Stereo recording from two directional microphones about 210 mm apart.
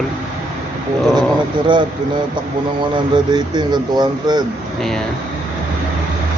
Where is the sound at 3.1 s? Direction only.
20° right (ahead or behind).